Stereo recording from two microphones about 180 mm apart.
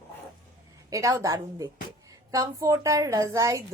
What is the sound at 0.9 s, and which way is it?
A woman's voice, 15° right (ahead or behind).